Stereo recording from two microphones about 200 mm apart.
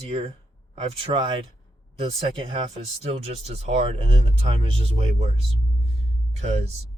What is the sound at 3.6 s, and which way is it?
Speech, 30° right (ahead or behind).